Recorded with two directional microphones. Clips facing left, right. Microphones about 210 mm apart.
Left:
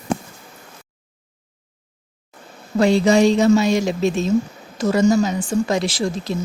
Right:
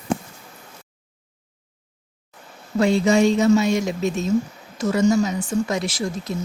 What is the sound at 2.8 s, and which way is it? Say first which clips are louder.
Speech: left 3 dB; 90° left.